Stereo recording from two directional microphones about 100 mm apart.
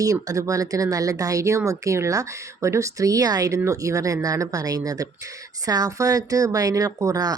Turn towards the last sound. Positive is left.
turn(degrees=-40)  # may be behind; listen again after turning